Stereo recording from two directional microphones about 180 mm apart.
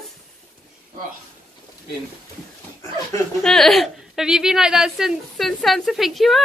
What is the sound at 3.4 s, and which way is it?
A woman's voice, centre (ahead or behind).